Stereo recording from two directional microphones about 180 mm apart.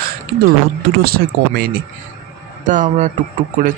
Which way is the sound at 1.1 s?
60° right (ahead or behind).